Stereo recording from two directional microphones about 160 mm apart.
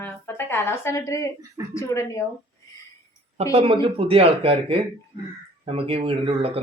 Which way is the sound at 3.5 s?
35° right (ahead or behind).